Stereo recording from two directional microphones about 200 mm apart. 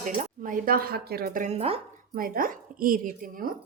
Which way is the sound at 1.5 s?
30° right (ahead or behind).